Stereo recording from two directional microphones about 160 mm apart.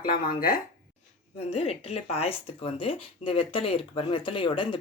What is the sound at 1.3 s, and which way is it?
Speech, 40° left (ahead or behind).